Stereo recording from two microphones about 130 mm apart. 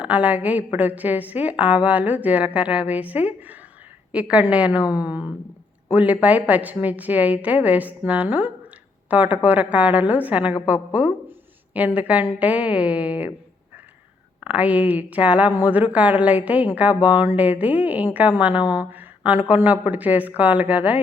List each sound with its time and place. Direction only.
0.0 s a woman's voice: 10° right (ahead or behind)
14.4 s a woman's voice: 10° right (ahead or behind)